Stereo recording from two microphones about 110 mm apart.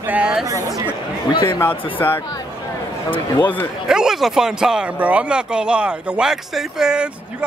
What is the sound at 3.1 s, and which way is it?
Speech, 45° left (ahead or behind).